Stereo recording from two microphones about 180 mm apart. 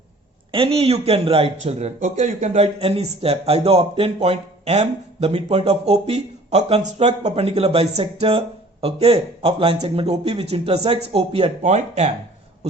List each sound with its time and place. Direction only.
0.5 s speech: 30° right (ahead or behind)